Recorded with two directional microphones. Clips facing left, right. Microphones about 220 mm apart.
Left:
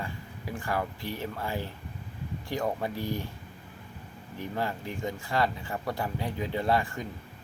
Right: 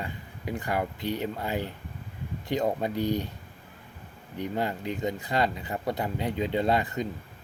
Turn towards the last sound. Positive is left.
turn(degrees=-20)  # may be behind; listen again after turning